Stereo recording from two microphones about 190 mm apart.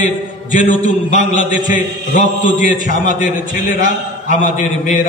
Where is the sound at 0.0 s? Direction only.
45° left (ahead or behind).